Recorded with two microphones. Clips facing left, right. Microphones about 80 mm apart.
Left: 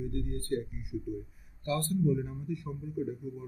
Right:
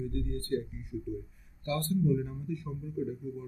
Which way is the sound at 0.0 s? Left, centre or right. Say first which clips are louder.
Right 1 dB; centre.